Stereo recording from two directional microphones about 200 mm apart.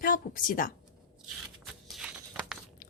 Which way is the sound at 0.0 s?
40° left (ahead or behind).